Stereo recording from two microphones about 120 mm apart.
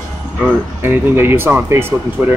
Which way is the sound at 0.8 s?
20° right (ahead or behind).